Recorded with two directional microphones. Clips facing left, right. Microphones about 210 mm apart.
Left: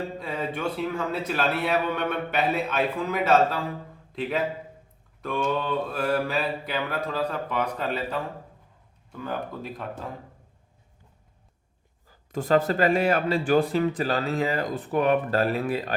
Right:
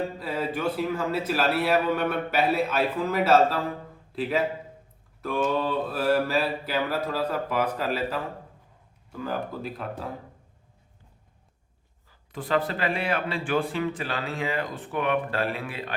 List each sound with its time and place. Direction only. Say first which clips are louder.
0.2 s a man's voice: right 1 dB; 5° right (ahead or behind)
12.0 s a man's voice: left 6 dB; 45° left (ahead or behind)